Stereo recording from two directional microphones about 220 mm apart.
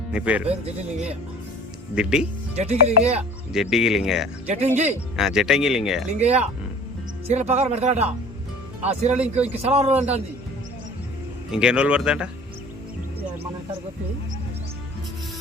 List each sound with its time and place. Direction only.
0.1 s speech: 5° right (ahead or behind)
0.4 s speech: 30° right (ahead or behind)
2.0 s speech: 5° right (ahead or behind)
2.6 s speech: 30° right (ahead or behind)
3.5 s speech: centre (ahead or behind)
4.4 s speech: 30° right (ahead or behind)
5.1 s speech: 5° right (ahead or behind)
6.1 s speech: 30° right (ahead or behind)
11.5 s speech: 5° right (ahead or behind)